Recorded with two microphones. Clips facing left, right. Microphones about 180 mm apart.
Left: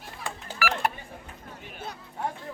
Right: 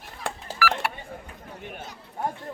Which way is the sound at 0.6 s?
20° left (ahead or behind).